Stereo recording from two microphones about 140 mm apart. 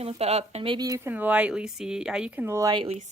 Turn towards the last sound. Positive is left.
turn(degrees=-45)  # may be behind; listen again after turning